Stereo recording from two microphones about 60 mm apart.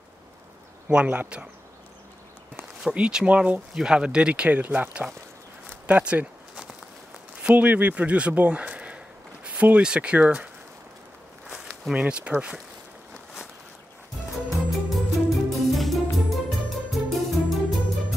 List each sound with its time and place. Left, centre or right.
1.0 s speech: right
2.8 s speech: centre
5.9 s a sound: right
7.4 s speech: right
11.9 s speech: centre
14.5 s music: centre